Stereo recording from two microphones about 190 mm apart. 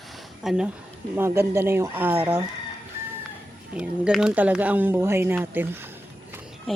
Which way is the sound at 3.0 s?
15° right (ahead or behind).